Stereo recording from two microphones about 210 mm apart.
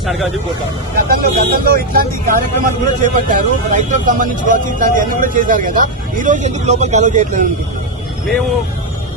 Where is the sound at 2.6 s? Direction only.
35° right (ahead or behind).